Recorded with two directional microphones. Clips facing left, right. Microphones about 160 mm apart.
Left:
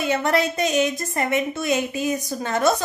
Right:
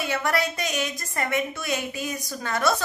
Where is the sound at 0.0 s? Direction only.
25° left (ahead or behind).